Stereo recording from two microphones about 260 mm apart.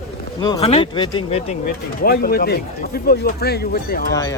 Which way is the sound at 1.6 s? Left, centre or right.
Left.